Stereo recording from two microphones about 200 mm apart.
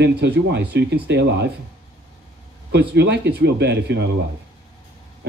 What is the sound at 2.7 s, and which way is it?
A man's voice, 60° right (ahead or behind).